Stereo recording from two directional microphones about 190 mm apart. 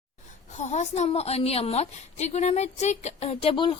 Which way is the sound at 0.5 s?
40° left (ahead or behind).